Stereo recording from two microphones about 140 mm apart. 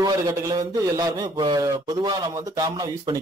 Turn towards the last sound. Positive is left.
turn(degrees=-25)  # may be behind; listen again after turning